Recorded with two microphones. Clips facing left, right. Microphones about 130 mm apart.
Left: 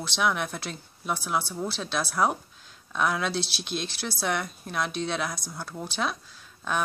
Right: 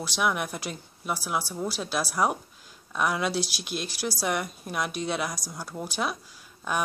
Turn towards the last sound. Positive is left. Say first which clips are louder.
# even
turn(degrees=-10)  # may be behind; listen again after turning